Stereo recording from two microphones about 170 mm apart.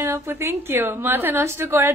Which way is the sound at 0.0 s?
15° right (ahead or behind).